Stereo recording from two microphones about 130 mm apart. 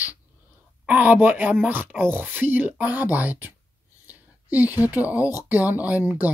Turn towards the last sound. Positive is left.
turn(degrees=-15)  # may be behind; listen again after turning